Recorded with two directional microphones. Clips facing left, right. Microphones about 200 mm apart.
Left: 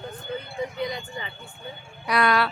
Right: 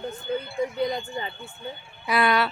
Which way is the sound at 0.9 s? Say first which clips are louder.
Right 4 dB; 35° right (ahead or behind).